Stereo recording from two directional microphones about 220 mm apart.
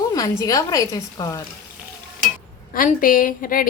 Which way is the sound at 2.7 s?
40° left (ahead or behind).